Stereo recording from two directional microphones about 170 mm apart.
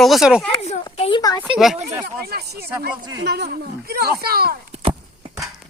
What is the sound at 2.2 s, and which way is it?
Speech, 70° right (ahead or behind).